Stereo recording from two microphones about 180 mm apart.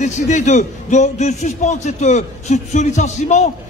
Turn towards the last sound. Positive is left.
turn(degrees=40)  # may be behind; listen again after turning